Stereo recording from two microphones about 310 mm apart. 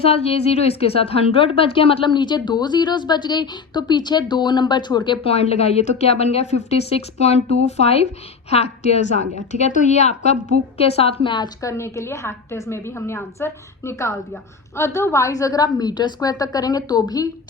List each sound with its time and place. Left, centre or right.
0.0 s a woman's voice: centre